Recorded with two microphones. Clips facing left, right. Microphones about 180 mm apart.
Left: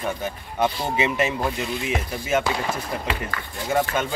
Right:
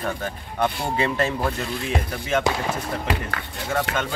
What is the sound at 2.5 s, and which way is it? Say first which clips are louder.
Speech: right 2 dB; 20° right (ahead or behind).